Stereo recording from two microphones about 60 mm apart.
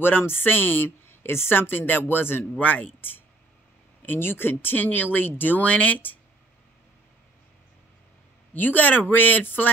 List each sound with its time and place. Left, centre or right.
0.0 s speech: left
4.0 s speech: left
8.5 s speech: left